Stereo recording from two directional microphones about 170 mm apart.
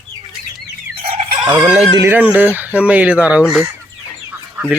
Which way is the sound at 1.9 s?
15° right (ahead or behind).